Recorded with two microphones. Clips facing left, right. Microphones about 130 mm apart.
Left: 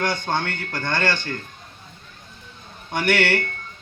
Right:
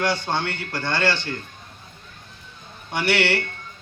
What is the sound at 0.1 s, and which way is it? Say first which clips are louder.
Speech: even; 50° left (ahead or behind).